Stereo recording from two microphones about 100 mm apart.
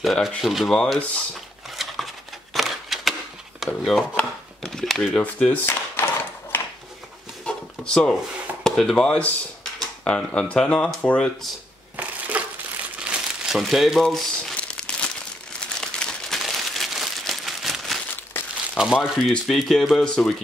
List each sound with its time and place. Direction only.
0.0 s speech: centre (ahead or behind)
1.8 s a sound: centre (ahead or behind)
4.2 s chopping: 5° left (ahead or behind)
5.1 s speech: 10° left (ahead or behind)
6.5 s a sound: 20° left (ahead or behind)
7.4 s a sound: 10° left (ahead or behind)
8.6 s speech: 5° left (ahead or behind)
12.0 s crushing: 15° right (ahead or behind)
13.0 s crumpling: 5° right (ahead or behind)
18.8 s speech: 5° right (ahead or behind)